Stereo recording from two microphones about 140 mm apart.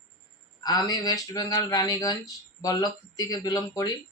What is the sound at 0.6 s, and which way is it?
Speech, 30° left (ahead or behind).